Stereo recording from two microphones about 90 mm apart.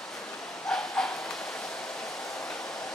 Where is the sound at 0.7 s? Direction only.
10° left (ahead or behind).